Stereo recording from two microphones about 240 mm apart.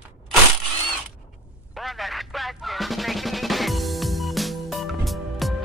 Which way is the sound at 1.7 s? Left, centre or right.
Centre.